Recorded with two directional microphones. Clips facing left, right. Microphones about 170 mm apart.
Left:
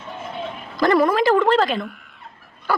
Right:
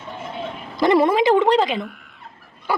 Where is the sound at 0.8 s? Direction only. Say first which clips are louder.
Right 1 dB; 25° right (ahead or behind).